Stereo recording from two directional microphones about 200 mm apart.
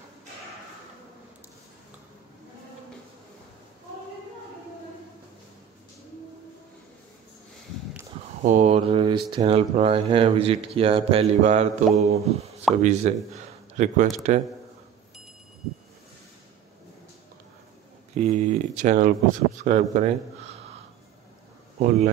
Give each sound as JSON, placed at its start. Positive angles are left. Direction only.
{"t": 8.4, "sound": "a man's voice", "side_deg": -40}
{"t": 18.1, "sound": "speech", "side_deg": -35}
{"t": 21.7, "sound": "speech", "side_deg": -40}